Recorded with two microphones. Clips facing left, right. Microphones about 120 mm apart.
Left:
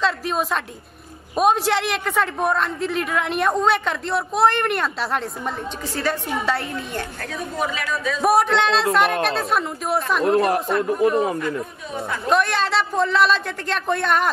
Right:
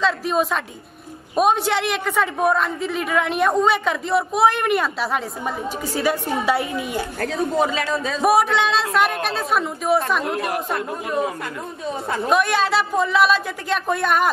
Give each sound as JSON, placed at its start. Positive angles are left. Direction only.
{"t": 0.0, "sound": "a man's voice", "side_deg": 0}
{"t": 7.3, "sound": "a man's voice", "side_deg": -30}
{"t": 8.2, "sound": "a man's voice", "side_deg": 0}
{"t": 10.2, "sound": "speech", "side_deg": 30}
{"t": 12.3, "sound": "a man's voice", "side_deg": -5}